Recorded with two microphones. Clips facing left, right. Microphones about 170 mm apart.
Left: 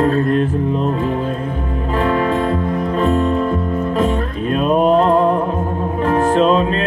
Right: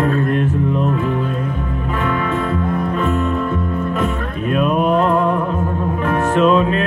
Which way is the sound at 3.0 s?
35° left (ahead or behind).